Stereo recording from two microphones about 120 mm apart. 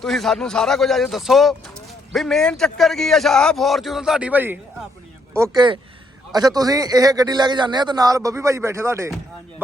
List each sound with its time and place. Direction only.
0.0 s a man's voice: 5° left (ahead or behind); by 4.6 s 15° right (ahead or behind)
5.5 s a man's voice: 40° right (ahead or behind); by 9.0 s 25° right (ahead or behind)